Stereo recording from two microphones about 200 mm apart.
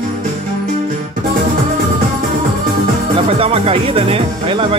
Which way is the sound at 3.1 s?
30° right (ahead or behind).